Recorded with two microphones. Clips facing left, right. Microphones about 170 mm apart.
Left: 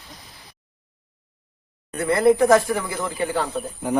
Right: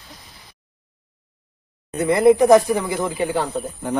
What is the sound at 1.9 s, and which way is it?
Speech, 20° right (ahead or behind).